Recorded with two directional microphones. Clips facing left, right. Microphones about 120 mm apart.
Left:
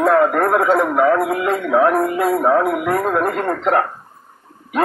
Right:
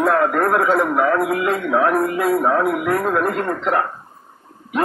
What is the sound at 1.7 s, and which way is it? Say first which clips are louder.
A man's voice: left 3 dB; 5° left (ahead or behind).